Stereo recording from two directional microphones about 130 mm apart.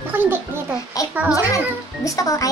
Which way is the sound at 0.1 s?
15° right (ahead or behind).